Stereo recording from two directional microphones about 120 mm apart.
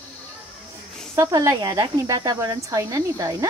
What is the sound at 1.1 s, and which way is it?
Speech, 25° right (ahead or behind).